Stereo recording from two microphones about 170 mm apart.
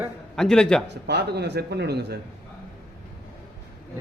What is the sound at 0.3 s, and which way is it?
Speech, 5° left (ahead or behind).